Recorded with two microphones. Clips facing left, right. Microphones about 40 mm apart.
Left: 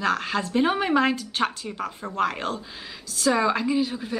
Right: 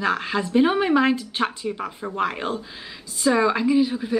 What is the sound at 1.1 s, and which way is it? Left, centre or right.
A woman's voice, centre.